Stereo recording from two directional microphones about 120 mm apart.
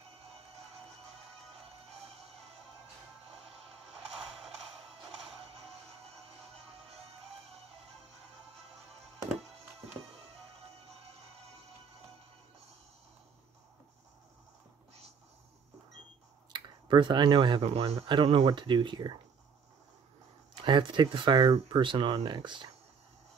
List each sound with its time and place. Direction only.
16.5 s speech: 40° right (ahead or behind)
17.6 s speech: 55° right (ahead or behind)
18.0 s speech: 45° right (ahead or behind)
20.6 s speech: 40° right (ahead or behind)